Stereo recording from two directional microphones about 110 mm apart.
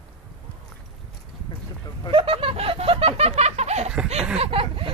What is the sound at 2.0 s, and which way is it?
Snicker, 55° right (ahead or behind).